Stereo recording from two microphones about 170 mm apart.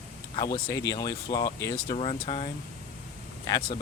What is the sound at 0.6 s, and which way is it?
Speech, 20° left (ahead or behind).